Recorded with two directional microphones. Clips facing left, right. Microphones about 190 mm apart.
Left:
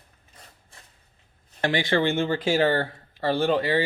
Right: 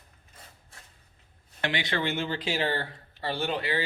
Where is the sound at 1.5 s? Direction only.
45° left (ahead or behind).